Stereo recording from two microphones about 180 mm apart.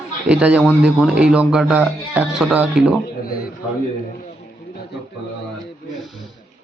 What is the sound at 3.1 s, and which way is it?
Speech, 55° left (ahead or behind).